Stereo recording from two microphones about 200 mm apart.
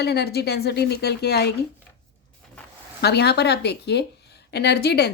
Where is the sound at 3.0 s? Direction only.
55° left (ahead or behind).